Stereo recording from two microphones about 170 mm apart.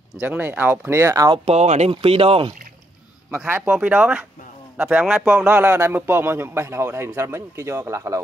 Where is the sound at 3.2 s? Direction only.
10° right (ahead or behind).